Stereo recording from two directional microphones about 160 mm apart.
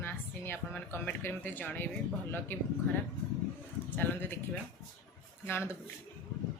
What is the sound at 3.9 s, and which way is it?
Speech, 10° left (ahead or behind).